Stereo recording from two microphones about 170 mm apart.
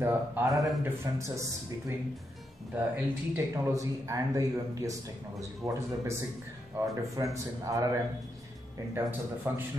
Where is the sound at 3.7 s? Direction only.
20° right (ahead or behind).